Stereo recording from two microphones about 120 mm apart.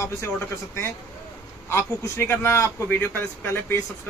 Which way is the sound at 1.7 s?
20° left (ahead or behind).